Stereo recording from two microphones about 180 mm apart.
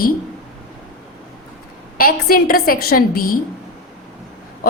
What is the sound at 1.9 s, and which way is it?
A woman's voice, 55° left (ahead or behind).